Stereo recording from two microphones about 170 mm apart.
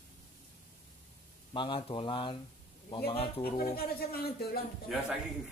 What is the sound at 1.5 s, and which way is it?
Speech, 30° left (ahead or behind).